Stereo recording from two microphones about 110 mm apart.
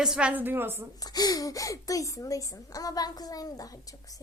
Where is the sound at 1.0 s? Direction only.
35° left (ahead or behind).